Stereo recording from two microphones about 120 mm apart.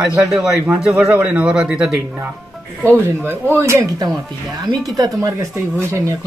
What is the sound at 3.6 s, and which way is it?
Speech, 25° right (ahead or behind).